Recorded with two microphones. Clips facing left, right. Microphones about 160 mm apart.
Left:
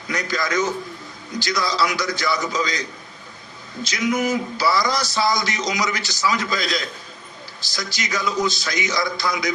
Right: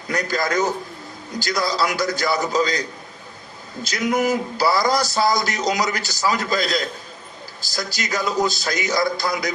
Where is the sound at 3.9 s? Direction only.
45° right (ahead or behind).